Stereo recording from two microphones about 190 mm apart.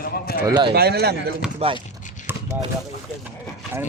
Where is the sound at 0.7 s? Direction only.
55° right (ahead or behind).